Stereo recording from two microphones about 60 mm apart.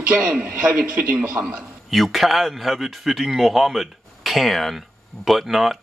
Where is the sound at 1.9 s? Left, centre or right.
Centre.